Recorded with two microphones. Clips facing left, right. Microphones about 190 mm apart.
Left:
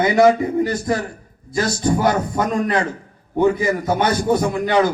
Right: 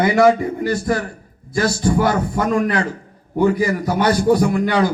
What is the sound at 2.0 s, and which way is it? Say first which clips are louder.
Speech: even; 20° left (ahead or behind).